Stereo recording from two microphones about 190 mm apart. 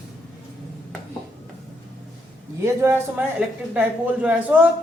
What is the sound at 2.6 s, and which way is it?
A woman's voice, 15° right (ahead or behind).